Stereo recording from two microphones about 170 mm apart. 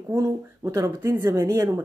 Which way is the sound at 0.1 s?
20° right (ahead or behind).